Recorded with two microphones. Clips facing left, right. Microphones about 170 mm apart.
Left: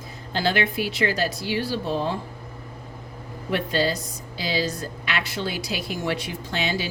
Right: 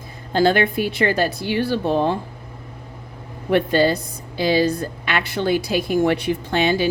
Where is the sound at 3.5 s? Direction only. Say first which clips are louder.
Right 7 dB; 55° right (ahead or behind).